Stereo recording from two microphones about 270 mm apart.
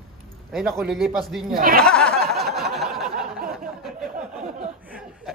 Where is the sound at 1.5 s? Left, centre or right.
Right.